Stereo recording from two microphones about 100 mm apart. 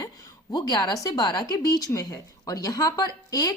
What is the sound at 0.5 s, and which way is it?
A woman's voice, 40° left (ahead or behind).